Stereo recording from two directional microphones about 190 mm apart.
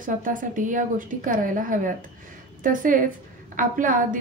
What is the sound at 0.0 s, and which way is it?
A woman's voice, 45° right (ahead or behind).